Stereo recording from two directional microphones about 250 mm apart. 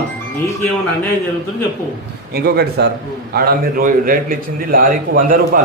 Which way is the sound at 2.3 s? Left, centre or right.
Right.